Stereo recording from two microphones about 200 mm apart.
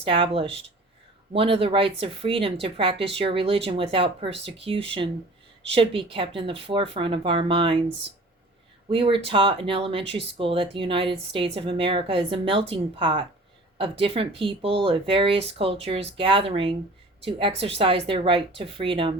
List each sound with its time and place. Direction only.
0.0 s speech: 25° right (ahead or behind)
8.9 s speech: 25° right (ahead or behind)